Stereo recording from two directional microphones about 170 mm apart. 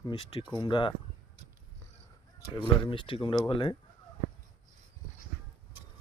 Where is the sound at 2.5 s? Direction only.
30° left (ahead or behind).